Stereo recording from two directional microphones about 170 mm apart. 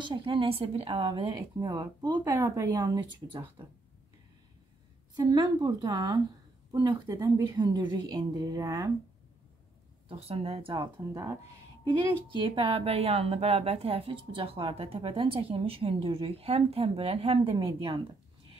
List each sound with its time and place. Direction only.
0.0 s a woman's voice: 30° right (ahead or behind)
5.1 s a woman's voice: 25° right (ahead or behind)
10.0 s speech: 35° right (ahead or behind)